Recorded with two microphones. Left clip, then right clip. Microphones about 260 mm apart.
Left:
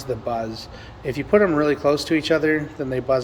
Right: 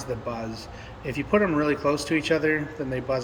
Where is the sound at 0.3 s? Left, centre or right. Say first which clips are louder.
Left 7 dB; centre.